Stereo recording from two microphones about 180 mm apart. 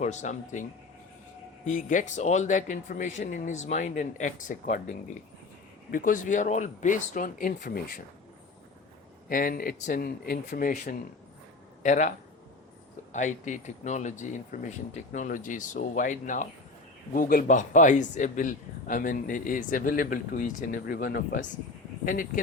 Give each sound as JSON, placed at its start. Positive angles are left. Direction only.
{"t": 0.0, "sound": "speech", "side_deg": 40}
{"t": 9.3, "sound": "speech", "side_deg": 55}
{"t": 13.1, "sound": "speech", "side_deg": 45}